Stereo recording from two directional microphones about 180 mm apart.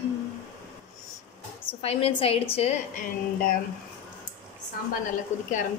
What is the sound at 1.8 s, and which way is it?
Speech, 35° left (ahead or behind).